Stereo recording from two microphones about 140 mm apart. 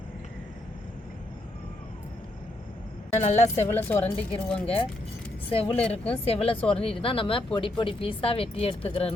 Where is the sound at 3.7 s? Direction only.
15° left (ahead or behind).